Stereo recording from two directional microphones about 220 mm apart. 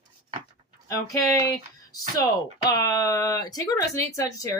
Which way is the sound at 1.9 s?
15° left (ahead or behind).